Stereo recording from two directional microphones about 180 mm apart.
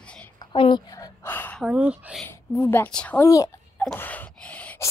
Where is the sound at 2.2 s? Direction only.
10° left (ahead or behind).